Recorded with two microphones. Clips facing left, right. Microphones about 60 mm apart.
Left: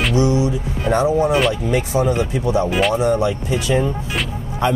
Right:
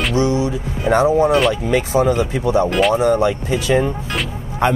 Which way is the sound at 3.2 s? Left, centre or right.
Right.